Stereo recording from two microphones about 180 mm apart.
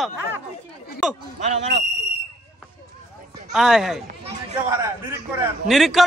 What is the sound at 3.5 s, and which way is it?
Speech, 5° right (ahead or behind).